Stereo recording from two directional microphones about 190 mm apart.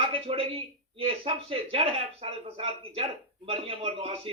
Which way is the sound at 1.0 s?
30° right (ahead or behind).